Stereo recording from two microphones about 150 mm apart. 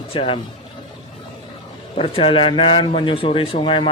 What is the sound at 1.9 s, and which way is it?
A man's voice, 40° left (ahead or behind).